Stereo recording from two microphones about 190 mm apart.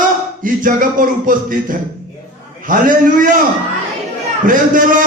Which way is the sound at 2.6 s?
45° right (ahead or behind).